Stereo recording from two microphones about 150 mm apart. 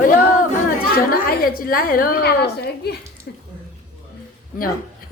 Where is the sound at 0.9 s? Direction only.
80° left.